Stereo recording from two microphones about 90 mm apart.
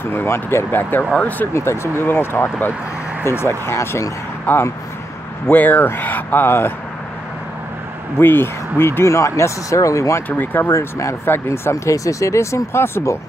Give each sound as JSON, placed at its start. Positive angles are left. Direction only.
{"t": 0.0, "sound": "speech", "side_deg": 25}
{"t": 8.2, "sound": "speech", "side_deg": 25}
{"t": 10.3, "sound": "speech", "side_deg": 20}